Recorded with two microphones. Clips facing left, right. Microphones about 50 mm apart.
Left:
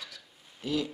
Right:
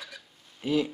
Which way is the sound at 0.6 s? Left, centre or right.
Right.